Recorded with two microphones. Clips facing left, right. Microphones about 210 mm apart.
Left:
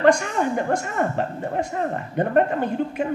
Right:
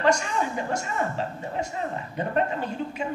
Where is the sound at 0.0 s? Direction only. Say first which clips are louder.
Left 5 dB; 55° left (ahead or behind).